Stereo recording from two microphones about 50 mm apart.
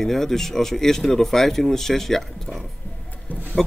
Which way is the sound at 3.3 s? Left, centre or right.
Left.